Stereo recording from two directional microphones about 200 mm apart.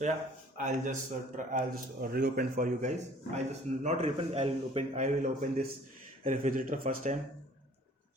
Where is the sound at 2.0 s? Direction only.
50° right (ahead or behind).